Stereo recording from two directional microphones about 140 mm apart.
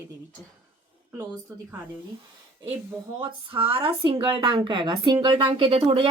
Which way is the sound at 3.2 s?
40° right (ahead or behind).